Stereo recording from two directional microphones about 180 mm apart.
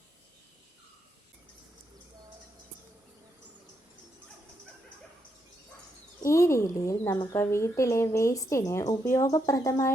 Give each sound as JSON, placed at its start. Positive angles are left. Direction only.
{"t": 6.2, "sound": "speech", "side_deg": 15}